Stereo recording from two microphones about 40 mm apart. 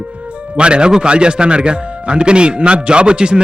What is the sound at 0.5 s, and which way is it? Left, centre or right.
Speech, right.